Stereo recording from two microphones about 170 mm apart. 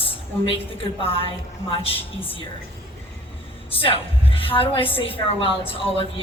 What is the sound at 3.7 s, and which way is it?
A woman's voice, 35° left (ahead or behind).